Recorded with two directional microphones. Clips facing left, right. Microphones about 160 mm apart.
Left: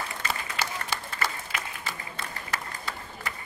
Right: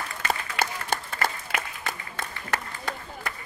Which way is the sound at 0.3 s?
50° right (ahead or behind).